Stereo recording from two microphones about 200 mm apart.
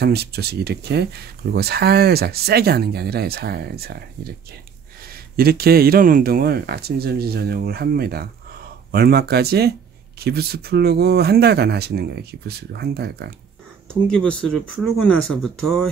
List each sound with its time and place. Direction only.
0.0 s a man's voice: 55° right (ahead or behind)
14.0 s speech: 5° left (ahead or behind)